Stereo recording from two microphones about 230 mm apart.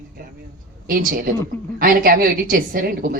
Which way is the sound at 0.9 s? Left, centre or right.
Right.